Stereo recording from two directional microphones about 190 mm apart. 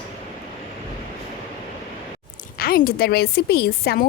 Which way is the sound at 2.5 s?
50° left (ahead or behind).